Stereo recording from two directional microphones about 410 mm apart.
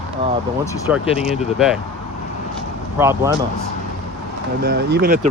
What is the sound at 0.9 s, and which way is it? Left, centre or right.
Speech, centre.